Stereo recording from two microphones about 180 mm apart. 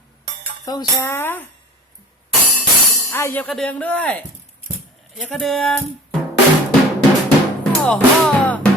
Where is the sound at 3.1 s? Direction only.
15° left (ahead or behind).